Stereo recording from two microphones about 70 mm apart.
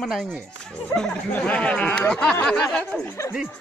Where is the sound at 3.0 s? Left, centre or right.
Left.